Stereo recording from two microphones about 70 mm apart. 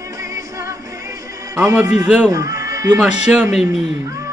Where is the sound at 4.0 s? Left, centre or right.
Right.